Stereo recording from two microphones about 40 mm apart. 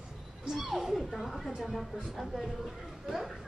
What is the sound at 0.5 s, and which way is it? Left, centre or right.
Speech, centre.